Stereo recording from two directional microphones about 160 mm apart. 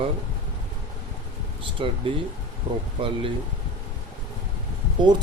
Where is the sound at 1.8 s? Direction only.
30° right (ahead or behind).